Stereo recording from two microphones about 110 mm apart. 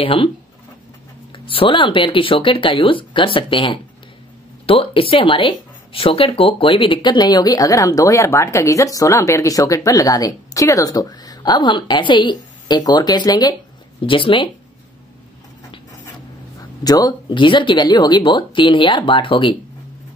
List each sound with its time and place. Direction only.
0.0 s speech: 55° left (ahead or behind)
1.3 s speech: 55° left (ahead or behind); by 13.6 s 40° left (ahead or behind)
14.0 s speech: 50° left (ahead or behind)
16.8 s speech: 35° left (ahead or behind)